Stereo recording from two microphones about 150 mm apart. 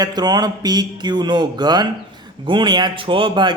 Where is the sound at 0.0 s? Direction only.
25° right (ahead or behind).